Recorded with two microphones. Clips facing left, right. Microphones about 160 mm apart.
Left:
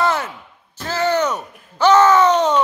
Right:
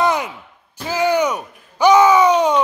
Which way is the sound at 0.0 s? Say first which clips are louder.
Right 1 dB; 15° right (ahead or behind).